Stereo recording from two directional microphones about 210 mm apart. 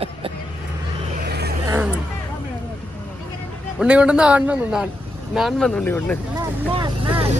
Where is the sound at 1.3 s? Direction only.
50° right (ahead or behind).